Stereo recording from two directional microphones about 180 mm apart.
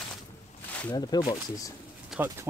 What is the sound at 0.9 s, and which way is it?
Speech, 20° left (ahead or behind).